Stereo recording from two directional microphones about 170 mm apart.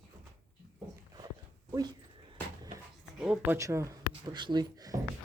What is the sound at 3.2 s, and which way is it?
Speech, 5° right (ahead or behind).